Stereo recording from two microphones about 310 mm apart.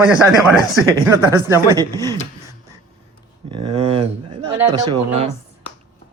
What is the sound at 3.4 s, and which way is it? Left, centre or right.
Speech, centre.